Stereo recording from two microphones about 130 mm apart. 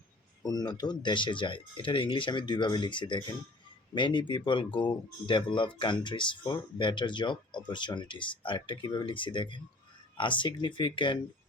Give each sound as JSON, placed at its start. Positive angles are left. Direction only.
{"t": 0.4, "sound": "speech", "side_deg": 30}